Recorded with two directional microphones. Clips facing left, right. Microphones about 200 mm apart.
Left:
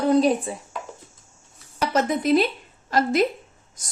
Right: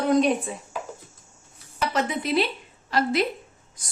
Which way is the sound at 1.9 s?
45° left (ahead or behind).